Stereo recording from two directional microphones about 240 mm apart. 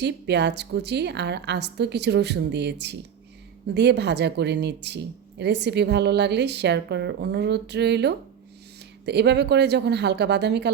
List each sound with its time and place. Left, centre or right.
0.0 s speech: right